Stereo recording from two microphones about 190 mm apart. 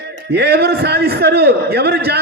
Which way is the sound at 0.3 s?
60° right (ahead or behind).